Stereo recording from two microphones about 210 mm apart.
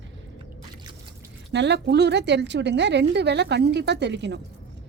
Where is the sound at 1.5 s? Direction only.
55° right (ahead or behind).